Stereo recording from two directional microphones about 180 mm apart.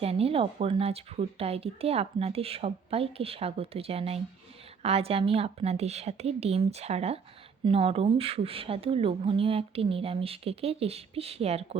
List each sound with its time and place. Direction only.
0.0 s speech: 35° right (ahead or behind)